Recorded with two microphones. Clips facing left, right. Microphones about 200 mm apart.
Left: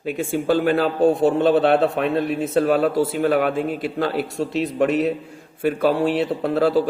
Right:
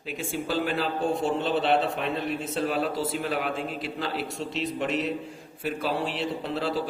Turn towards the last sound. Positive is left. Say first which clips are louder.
# left 9 dB
turn(degrees=55)  # may be behind; listen again after turning